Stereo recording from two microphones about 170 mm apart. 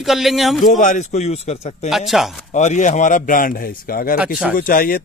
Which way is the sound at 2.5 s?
45° left (ahead or behind).